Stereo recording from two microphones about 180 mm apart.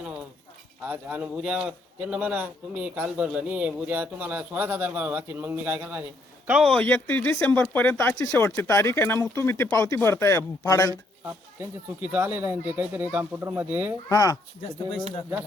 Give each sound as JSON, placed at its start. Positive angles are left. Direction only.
{"t": 0.8, "sound": "a man's voice", "side_deg": -10}
{"t": 11.3, "sound": "a man's voice", "side_deg": -10}
{"t": 14.1, "sound": "speech", "side_deg": 20}